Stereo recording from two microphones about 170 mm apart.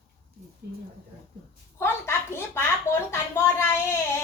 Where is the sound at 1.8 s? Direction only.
15° left (ahead or behind).